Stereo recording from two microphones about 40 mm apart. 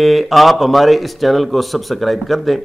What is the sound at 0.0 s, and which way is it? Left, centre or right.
Speech, centre.